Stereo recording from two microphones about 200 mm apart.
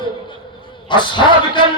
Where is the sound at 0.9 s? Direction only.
25° left (ahead or behind).